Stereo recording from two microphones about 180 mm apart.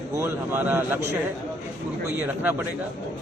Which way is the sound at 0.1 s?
15° right (ahead or behind).